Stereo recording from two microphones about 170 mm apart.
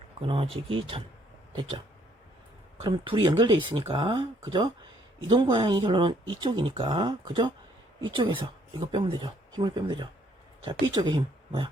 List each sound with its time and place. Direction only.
0.2 s speech: 35° right (ahead or behind)
2.8 s speech: 30° right (ahead or behind)